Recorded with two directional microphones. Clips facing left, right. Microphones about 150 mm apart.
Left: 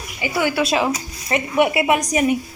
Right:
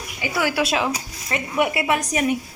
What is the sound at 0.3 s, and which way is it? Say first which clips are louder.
Speech: left 3 dB; 5° right (ahead or behind).